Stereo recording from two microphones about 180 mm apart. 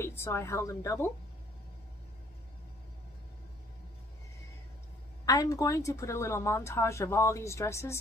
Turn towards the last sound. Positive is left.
turn(degrees=15)  # may be behind; listen again after turning